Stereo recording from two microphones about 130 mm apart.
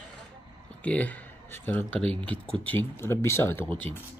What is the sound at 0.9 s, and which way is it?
Speech, 10° left (ahead or behind).